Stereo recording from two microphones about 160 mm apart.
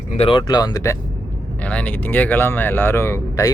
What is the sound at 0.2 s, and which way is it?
Speech, 30° left (ahead or behind).